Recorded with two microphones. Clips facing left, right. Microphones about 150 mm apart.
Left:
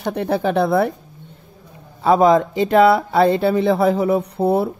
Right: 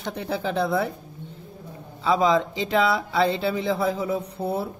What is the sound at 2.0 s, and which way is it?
Speech, 55° left (ahead or behind).